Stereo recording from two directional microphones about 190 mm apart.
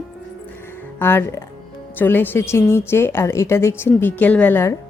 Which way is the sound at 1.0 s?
10° left (ahead or behind).